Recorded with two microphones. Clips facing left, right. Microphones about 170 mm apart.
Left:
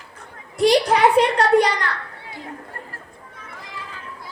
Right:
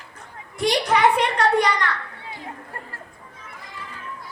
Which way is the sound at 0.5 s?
35° left (ahead or behind).